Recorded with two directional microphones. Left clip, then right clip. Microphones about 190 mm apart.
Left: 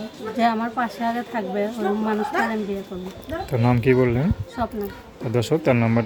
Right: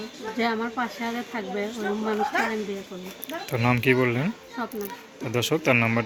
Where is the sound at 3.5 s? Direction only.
10° left (ahead or behind).